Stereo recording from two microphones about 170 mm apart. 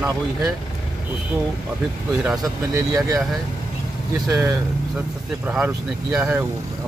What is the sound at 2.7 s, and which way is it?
Speech, 20° right (ahead or behind).